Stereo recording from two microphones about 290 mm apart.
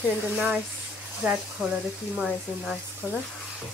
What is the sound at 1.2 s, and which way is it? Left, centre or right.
Speech, centre.